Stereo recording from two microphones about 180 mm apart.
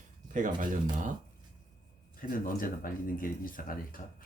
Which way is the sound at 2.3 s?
50° left (ahead or behind).